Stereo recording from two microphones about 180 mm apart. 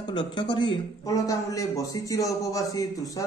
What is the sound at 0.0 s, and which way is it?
A man's voice, 25° left (ahead or behind).